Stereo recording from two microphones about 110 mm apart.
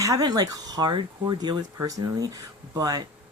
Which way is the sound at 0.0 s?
35° right (ahead or behind).